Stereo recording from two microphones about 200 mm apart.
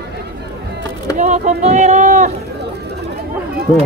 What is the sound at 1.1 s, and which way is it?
Speech, 35° right (ahead or behind).